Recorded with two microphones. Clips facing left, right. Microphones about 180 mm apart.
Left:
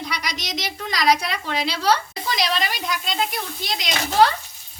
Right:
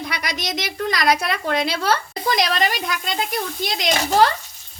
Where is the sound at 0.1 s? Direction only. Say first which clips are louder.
Right 2 dB; 55° right (ahead or behind).